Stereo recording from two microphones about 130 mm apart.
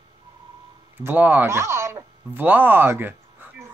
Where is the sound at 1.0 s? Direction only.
15° right (ahead or behind).